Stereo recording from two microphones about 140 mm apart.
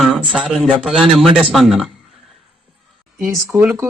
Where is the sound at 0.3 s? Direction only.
5° right (ahead or behind).